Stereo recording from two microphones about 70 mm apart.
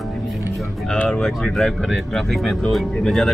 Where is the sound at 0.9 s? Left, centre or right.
Centre.